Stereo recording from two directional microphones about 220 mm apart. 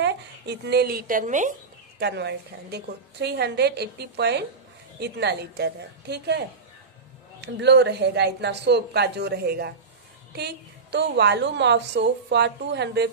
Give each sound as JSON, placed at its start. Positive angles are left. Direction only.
{"t": 0.0, "sound": "speech", "side_deg": -50}
{"t": 2.0, "sound": "a woman's voice", "side_deg": -50}
{"t": 7.4, "sound": "a woman's voice", "side_deg": -50}